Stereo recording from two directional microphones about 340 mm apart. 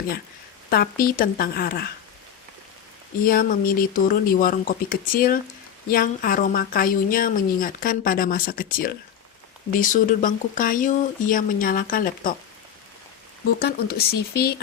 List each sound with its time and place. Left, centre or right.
0.7 s a woman's voice: left
3.2 s a woman's voice: left
13.6 s a woman's voice: left